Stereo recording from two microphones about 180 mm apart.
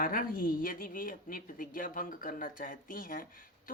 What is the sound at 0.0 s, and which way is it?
A woman's voice, 50° left (ahead or behind).